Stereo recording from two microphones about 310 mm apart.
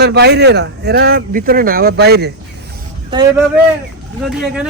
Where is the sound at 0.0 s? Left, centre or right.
Right.